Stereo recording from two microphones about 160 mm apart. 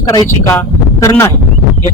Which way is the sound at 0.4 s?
20° left (ahead or behind).